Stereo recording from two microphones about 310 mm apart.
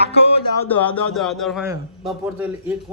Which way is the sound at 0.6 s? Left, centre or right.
Centre.